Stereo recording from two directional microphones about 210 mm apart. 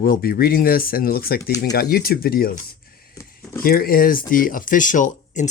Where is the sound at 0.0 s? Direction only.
45° left (ahead or behind).